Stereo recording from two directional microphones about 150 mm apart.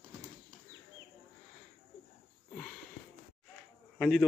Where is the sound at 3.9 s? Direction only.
Centre (ahead or behind).